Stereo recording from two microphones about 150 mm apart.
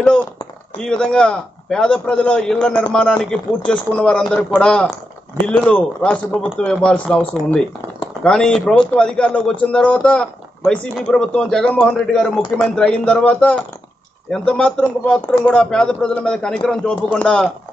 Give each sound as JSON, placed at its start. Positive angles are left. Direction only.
{"t": 0.7, "sound": "a man's voice", "side_deg": 5}